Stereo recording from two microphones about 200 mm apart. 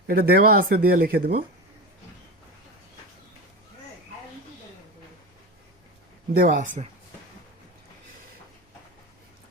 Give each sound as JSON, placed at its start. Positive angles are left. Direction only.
{"t": 0.1, "sound": "speech", "side_deg": -50}
{"t": 6.3, "sound": "speech", "side_deg": -45}